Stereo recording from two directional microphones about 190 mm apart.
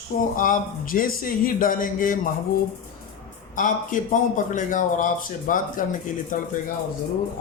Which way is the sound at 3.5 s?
45° left (ahead or behind).